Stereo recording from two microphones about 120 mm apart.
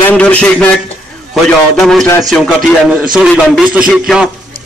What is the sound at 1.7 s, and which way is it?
A man's voice, centre (ahead or behind).